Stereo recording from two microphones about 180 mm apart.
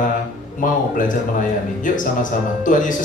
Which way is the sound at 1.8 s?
45° left (ahead or behind).